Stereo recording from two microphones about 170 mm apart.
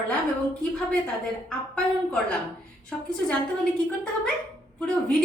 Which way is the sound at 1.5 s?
5° left (ahead or behind).